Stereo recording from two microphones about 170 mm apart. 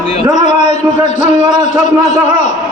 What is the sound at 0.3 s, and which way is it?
A man's voice, 45° left (ahead or behind).